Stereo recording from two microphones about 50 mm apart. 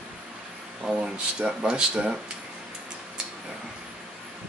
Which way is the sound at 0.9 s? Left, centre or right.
Centre.